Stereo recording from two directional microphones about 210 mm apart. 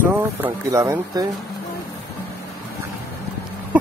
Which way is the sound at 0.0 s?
10° right (ahead or behind).